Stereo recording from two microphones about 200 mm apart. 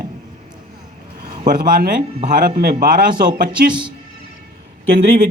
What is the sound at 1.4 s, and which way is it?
A man's voice, 45° right (ahead or behind).